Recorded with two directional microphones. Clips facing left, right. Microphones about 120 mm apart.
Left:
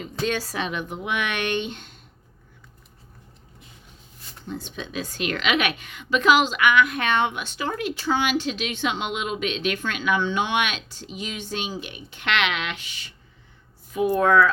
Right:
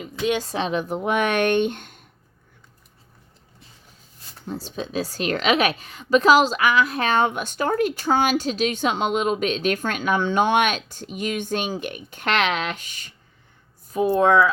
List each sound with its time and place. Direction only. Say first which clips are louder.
0.3 s a woman's voice: right 5 dB; 20° right (ahead or behind)
0.5 s speech: right 5 dB; 35° right (ahead or behind); by 2.0 s 50° right (ahead or behind)
4.4 s a woman's voice: right 3 dB; 35° right (ahead or behind)
14.1 s speech: right 1 dB; 20° right (ahead or behind)